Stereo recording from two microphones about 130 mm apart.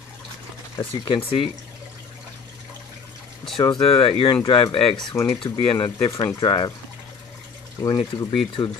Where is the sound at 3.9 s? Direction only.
45° left (ahead or behind).